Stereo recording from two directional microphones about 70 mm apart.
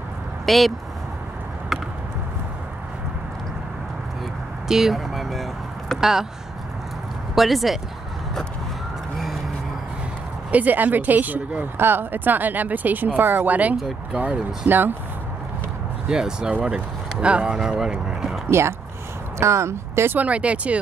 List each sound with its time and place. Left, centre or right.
0.5 s speech: centre
4.6 s a sound: centre
7.3 s speech: centre
10.5 s speech: right
16.1 s speech: centre
18.5 s speech: right
20.2 s speech: centre